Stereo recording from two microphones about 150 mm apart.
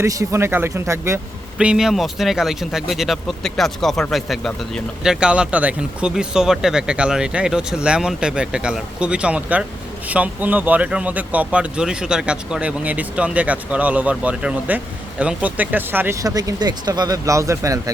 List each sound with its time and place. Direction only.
0.0 s speech: 20° right (ahead or behind)
1.5 s speech: 5° right (ahead or behind); by 17.9 s 20° right (ahead or behind)